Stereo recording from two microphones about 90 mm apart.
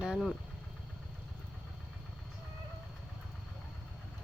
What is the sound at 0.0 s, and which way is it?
Vehicle, 5° right (ahead or behind).